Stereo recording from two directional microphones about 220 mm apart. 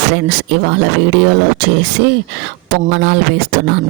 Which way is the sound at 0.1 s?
55° right (ahead or behind).